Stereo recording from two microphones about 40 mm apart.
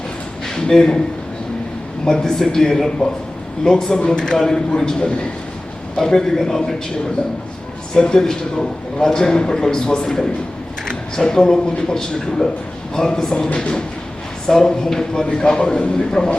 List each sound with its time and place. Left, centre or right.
0.4 s a man's voice: centre
2.0 s a man's voice: centre
4.9 s speech: left
6.1 s a man's voice: centre
7.9 s a man's voice: centre